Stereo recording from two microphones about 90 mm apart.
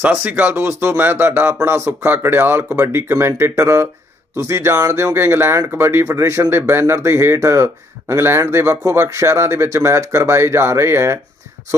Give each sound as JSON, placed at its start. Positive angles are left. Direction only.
{"t": 0.0, "sound": "speech", "side_deg": -20}
{"t": 0.5, "sound": "speech", "side_deg": -30}